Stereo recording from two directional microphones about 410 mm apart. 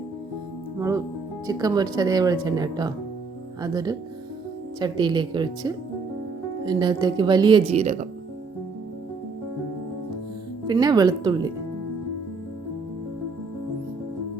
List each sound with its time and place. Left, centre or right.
0.8 s speech: centre
10.7 s speech: centre